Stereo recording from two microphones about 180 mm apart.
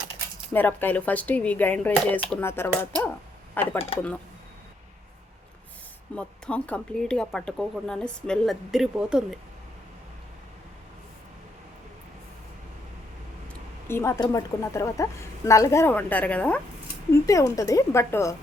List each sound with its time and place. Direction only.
0.5 s speech: 10° left (ahead or behind)
6.1 s speech: 5° left (ahead or behind)
13.5 s speech: 15° left (ahead or behind)
17.1 s speech: 15° left (ahead or behind)